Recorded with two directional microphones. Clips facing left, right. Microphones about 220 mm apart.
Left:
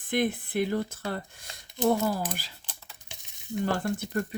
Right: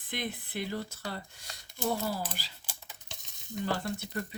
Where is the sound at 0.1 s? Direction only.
50° left (ahead or behind).